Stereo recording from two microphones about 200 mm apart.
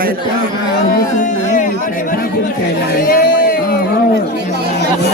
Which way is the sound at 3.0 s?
45° left (ahead or behind).